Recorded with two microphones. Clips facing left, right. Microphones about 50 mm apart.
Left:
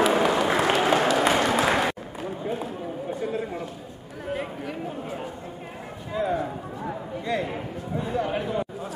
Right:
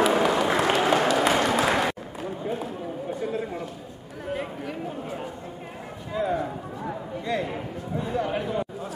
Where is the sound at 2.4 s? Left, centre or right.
Centre.